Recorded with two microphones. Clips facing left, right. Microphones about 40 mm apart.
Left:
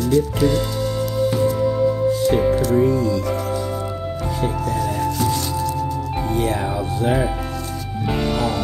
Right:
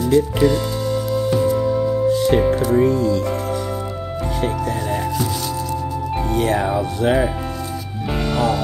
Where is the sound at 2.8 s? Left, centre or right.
Right.